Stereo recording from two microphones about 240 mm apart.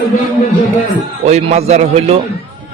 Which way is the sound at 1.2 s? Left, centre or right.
Right.